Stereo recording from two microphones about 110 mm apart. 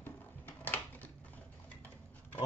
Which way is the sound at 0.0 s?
15° left (ahead or behind).